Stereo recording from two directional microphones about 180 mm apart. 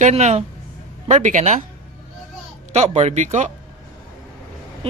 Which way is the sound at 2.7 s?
40° right (ahead or behind).